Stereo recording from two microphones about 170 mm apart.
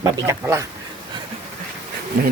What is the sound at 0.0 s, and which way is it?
Speech, 15° right (ahead or behind).